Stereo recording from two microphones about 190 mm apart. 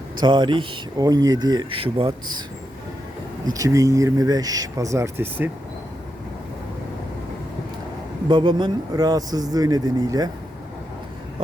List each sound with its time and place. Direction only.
0.2 s speech: 25° right (ahead or behind)
3.4 s speech: 15° right (ahead or behind)
8.3 s speech: 25° right (ahead or behind)